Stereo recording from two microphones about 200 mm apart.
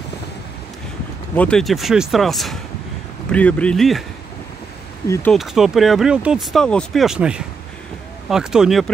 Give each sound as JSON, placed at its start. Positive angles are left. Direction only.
{"t": 1.3, "sound": "speech", "side_deg": 5}
{"t": 5.0, "sound": "speech", "side_deg": 15}
{"t": 5.3, "sound": "speech", "side_deg": 0}